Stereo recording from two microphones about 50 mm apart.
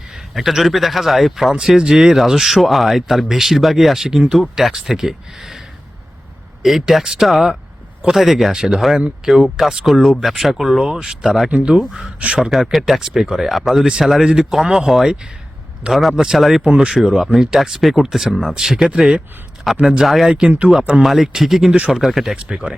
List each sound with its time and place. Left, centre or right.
0.1 s speech: centre
1.5 s speech: centre
7.3 s speech: centre
11.4 s speech: right
11.8 s speech: centre
12.0 s speech: right
12.4 s speech: centre